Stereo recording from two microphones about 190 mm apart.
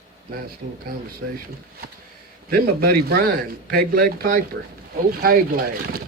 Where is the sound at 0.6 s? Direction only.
40° right (ahead or behind).